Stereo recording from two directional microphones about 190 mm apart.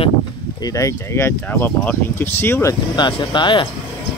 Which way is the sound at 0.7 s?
15° left (ahead or behind).